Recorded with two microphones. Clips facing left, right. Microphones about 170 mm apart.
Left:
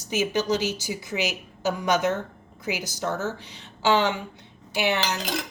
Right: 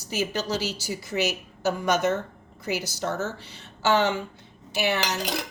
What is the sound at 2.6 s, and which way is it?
Speech, 15° left (ahead or behind).